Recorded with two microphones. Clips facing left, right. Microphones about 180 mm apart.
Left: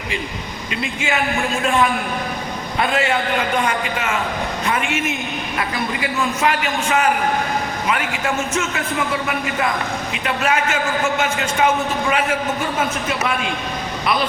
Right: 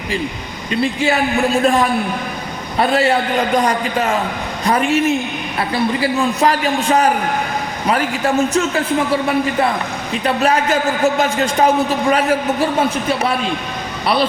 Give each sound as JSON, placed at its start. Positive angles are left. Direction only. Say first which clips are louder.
{"t": 0.7, "sound": "a woman's voice", "louder": "right 7 dB", "side_deg": -35}
{"t": 10.1, "sound": "a woman's voice", "louder": "right 6 dB", "side_deg": -35}